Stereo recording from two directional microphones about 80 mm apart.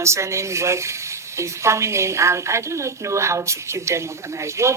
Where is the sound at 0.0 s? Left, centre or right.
Right.